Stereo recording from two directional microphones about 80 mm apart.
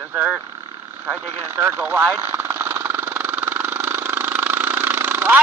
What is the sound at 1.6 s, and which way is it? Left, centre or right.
Vehicle, right.